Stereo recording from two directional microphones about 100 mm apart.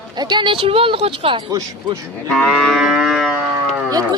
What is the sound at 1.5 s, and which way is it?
Speech, 40° right (ahead or behind).